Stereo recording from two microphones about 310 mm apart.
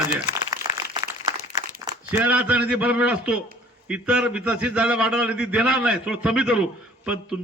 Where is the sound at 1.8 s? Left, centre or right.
Centre.